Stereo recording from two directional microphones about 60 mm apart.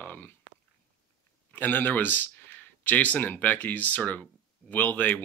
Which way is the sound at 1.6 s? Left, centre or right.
Left.